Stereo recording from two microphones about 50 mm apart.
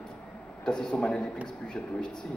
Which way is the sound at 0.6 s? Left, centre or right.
Centre.